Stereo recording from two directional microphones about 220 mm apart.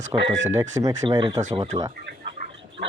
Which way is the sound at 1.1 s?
20° right (ahead or behind).